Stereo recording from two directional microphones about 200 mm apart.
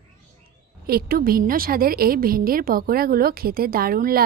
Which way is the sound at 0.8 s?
50° right (ahead or behind).